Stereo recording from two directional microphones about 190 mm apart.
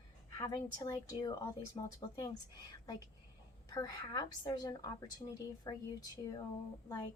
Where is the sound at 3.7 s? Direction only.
20° left (ahead or behind).